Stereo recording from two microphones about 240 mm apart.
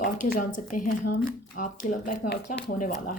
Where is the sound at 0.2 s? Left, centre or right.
Left.